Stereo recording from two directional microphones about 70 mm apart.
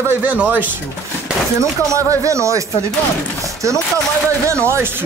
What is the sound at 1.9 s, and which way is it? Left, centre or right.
Speech, right.